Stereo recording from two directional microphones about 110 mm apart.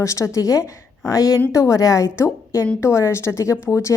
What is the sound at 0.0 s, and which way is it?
A woman's voice, 25° left (ahead or behind).